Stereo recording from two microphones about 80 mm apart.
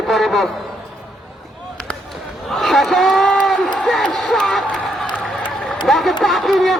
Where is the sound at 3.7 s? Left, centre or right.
Centre.